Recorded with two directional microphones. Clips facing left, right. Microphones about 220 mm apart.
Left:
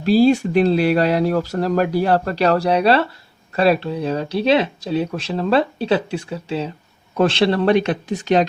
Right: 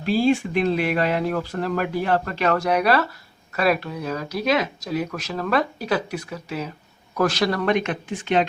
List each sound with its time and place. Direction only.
0.0 s speech: 40° left (ahead or behind)